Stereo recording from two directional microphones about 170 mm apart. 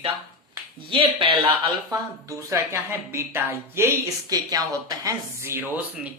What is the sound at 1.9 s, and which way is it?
A woman's voice, 20° right (ahead or behind).